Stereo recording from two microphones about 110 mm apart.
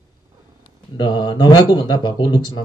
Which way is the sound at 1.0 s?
40° left (ahead or behind).